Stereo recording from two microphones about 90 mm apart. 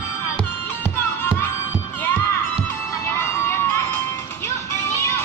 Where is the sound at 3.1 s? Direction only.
25° left (ahead or behind).